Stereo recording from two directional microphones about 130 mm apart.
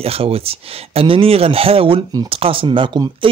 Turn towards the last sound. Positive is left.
turn(degrees=-40)  # may be behind; listen again after turning